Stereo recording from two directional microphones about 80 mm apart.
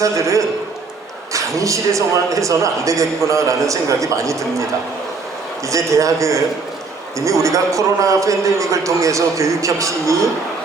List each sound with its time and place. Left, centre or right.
0.0 s a man's voice: right
5.6 s a man's voice: right